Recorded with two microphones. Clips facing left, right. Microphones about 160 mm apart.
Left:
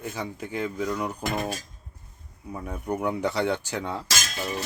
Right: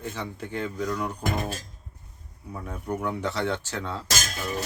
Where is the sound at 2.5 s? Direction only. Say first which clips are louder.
Left 2 dB; 10° left (ahead or behind).